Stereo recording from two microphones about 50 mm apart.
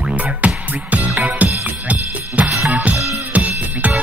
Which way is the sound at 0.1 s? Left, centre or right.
Right.